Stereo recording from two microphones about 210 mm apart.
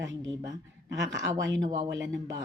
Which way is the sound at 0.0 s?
60° right (ahead or behind).